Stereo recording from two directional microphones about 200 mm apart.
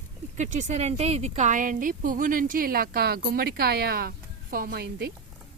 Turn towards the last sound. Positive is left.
turn(degrees=-50)  # may be behind; listen again after turning